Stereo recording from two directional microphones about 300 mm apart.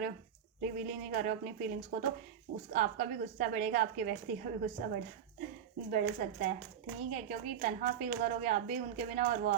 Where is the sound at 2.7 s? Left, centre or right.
Right.